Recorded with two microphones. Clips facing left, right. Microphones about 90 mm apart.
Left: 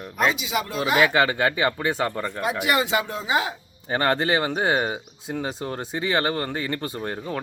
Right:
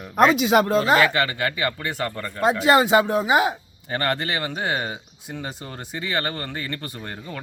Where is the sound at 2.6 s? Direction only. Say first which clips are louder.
Right 7 dB; 25° right (ahead or behind).